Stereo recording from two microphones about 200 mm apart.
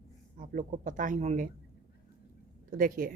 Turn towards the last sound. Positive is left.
turn(degrees=-45)  # may be behind; listen again after turning